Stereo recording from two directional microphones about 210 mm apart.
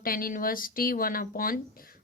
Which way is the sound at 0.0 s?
45° left (ahead or behind).